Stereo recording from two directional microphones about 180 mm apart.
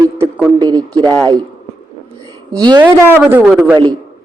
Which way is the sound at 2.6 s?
25° right (ahead or behind).